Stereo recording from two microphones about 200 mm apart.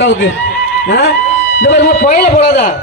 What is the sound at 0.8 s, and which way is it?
A man's voice, 50° left (ahead or behind).